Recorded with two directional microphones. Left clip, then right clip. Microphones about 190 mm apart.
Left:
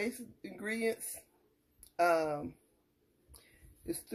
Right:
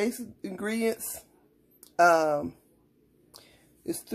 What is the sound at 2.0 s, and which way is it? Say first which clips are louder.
Speech: right 9 dB; 15° right (ahead or behind).